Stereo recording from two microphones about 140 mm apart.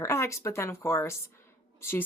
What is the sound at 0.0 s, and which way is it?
A woman's voice, 20° left (ahead or behind).